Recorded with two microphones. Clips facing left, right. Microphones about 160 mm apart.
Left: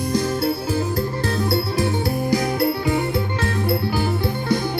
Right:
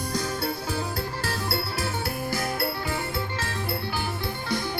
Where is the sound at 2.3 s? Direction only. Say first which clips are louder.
Left 9 dB; 20° left (ahead or behind).